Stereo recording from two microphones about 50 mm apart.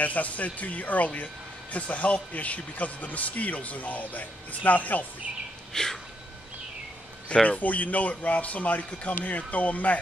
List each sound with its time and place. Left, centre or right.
0.0 s speech: left
5.7 s a sound: centre
7.4 s speech: left